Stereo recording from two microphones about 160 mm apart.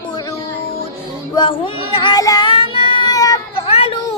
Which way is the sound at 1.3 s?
35° left (ahead or behind).